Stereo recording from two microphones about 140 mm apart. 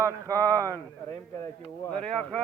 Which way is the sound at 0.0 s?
25° right (ahead or behind).